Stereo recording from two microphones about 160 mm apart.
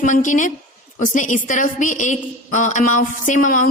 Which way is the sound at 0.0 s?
50° left (ahead or behind).